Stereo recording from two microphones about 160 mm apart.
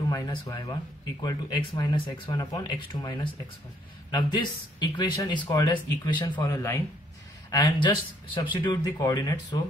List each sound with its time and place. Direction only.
0.1 s speech: 25° left (ahead or behind)